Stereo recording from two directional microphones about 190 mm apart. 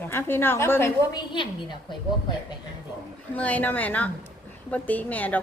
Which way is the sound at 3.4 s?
5° left (ahead or behind).